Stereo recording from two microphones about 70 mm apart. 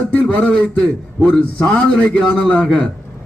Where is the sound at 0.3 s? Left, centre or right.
Centre.